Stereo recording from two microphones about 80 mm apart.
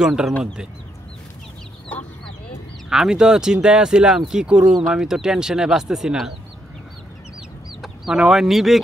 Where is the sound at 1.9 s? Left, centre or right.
Centre.